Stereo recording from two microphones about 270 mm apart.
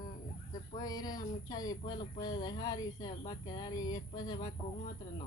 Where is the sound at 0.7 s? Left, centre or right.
Centre.